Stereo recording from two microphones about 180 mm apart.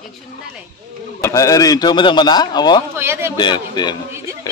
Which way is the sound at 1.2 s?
20° left (ahead or behind).